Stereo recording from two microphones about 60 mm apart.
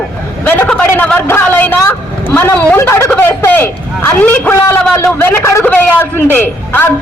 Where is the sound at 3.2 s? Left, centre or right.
Left.